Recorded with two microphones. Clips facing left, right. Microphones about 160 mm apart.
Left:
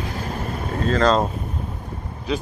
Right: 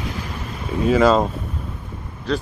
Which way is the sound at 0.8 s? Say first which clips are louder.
Right 3 dB; 10° right (ahead or behind).